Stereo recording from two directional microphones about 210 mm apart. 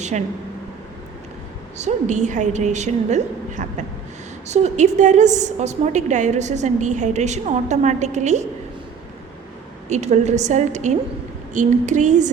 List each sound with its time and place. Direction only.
1.8 s a woman's voice: 35° right (ahead or behind)
9.9 s a woman's voice: 30° right (ahead or behind)